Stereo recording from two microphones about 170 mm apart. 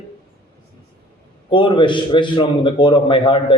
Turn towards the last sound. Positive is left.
turn(degrees=30)  # may be behind; listen again after turning